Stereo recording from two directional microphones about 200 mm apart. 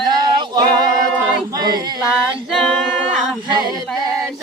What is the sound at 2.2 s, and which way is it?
Singing, centre (ahead or behind).